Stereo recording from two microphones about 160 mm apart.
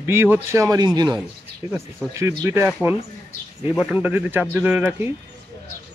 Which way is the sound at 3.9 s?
10° right (ahead or behind).